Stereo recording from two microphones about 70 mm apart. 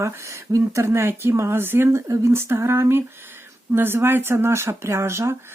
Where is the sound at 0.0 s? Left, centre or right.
Right.